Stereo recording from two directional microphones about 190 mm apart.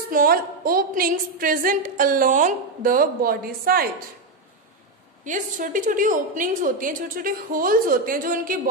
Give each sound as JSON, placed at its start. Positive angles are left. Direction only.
{"t": 0.1, "sound": "a woman's voice", "side_deg": -50}
{"t": 5.2, "sound": "a woman's voice", "side_deg": -40}